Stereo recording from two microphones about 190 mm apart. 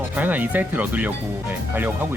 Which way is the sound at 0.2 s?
10° right (ahead or behind).